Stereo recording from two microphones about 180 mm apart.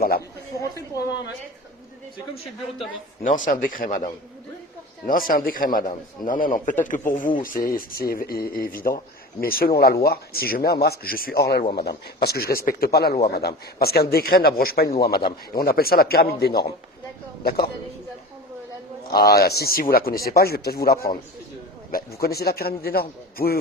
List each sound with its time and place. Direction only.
0.9 s a sound: 70° left (ahead or behind)
3.2 s a man's voice: 45° left (ahead or behind)
5.3 s a man's voice: 50° left (ahead or behind)
19.1 s speech: 60° left (ahead or behind)